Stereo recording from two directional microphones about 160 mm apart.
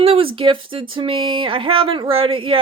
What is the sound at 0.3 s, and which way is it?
Speech, 30° right (ahead or behind).